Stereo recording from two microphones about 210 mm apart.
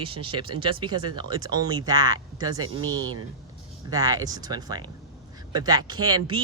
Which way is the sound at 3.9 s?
15° right (ahead or behind).